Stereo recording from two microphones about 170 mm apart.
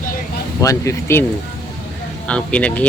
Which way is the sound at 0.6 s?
20° left (ahead or behind).